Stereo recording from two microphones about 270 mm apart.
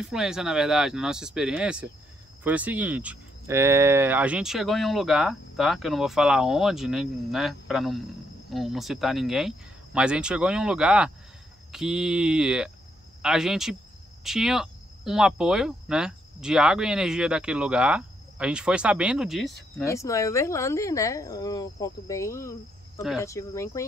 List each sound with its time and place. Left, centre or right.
0.0 s speech: centre
19.8 s speech: centre